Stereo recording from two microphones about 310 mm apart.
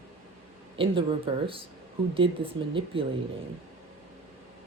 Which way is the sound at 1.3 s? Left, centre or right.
Centre.